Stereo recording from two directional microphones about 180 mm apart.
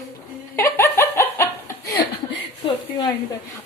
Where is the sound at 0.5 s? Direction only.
15° left (ahead or behind).